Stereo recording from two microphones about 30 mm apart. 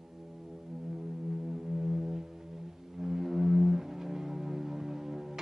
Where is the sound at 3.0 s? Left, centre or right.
Centre.